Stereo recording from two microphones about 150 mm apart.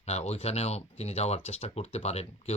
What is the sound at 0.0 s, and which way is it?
Speech, 45° left (ahead or behind).